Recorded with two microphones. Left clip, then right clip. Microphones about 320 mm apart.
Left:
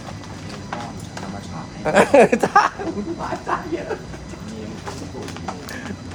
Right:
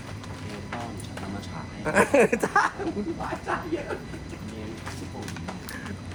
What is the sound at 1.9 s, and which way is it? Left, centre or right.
Chuckle, left.